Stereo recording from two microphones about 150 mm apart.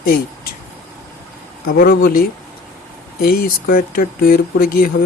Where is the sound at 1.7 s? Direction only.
85° left.